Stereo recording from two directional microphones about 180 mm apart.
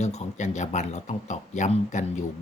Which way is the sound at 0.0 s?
40° left (ahead or behind).